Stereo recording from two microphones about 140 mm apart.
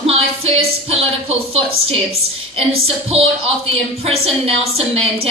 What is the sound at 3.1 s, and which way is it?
A woman's voice, 45° right (ahead or behind).